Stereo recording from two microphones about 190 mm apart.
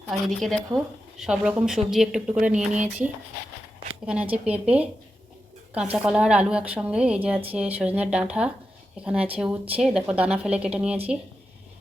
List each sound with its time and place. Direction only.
0.1 s speech: centre (ahead or behind)
2.4 s speech: 40° right (ahead or behind)
4.0 s speech: 5° right (ahead or behind)